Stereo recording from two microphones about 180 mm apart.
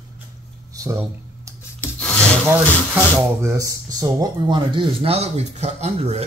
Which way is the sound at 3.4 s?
15° right (ahead or behind).